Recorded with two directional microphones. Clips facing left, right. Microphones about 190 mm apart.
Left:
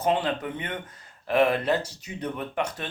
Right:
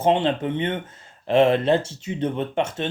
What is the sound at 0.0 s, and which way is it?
Speech, 25° right (ahead or behind).